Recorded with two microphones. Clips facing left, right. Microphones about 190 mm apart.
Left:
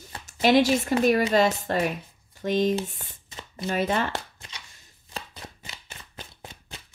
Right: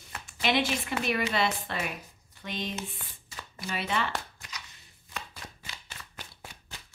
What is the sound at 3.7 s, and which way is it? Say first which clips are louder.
Speech: left 6 dB; 45° left (ahead or behind).